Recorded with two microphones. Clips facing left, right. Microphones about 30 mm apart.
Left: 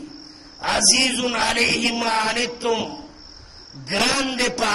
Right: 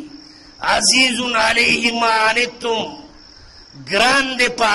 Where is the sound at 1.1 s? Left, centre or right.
Right.